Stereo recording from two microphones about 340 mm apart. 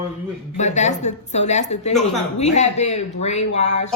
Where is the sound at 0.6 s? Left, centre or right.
Centre.